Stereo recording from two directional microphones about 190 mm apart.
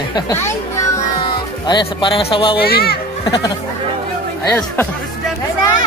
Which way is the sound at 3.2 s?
20° left (ahead or behind).